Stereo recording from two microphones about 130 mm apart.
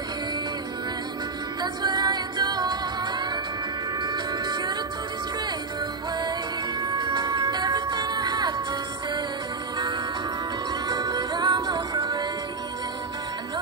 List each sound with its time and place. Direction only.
1.6 s music: 30° right (ahead or behind)
6.8 s music: 30° right (ahead or behind)
10.9 s music: 30° right (ahead or behind)